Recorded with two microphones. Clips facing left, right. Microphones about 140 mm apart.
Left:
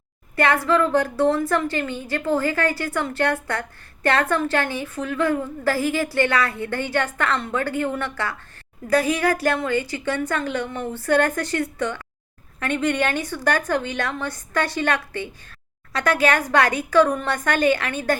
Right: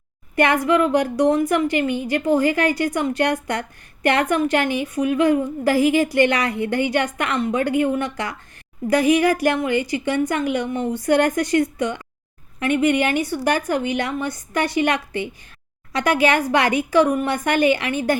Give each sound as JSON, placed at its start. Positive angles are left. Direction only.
{"t": 0.3, "sound": "a woman's voice", "side_deg": -15}